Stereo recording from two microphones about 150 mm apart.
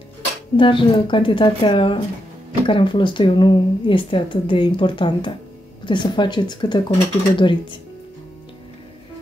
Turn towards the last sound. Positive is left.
turn(degrees=35)  # may be behind; listen again after turning